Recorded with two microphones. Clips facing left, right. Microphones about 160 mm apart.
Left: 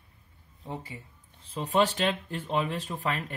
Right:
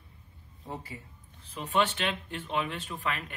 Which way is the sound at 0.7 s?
30° left (ahead or behind).